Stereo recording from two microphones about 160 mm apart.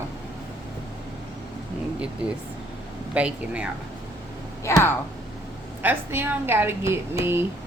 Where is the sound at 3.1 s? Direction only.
10° right (ahead or behind).